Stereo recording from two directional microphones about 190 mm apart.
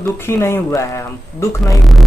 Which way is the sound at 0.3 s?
15° left (ahead or behind).